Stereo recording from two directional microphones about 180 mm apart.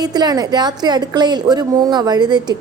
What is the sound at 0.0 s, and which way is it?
A woman's voice, 20° right (ahead or behind).